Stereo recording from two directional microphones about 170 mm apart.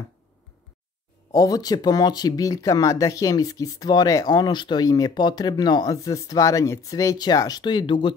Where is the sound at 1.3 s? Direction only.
20° left (ahead or behind).